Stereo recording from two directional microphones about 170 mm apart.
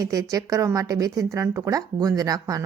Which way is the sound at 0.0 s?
20° right (ahead or behind).